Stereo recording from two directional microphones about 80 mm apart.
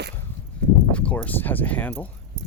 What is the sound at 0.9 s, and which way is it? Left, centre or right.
Speech, centre.